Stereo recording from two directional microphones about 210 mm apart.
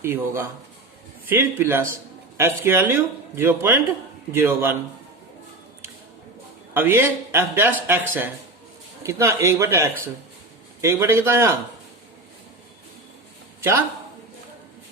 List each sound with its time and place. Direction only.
0.0 s a man's voice: 10° right (ahead or behind)
6.7 s a man's voice: 10° right (ahead or behind)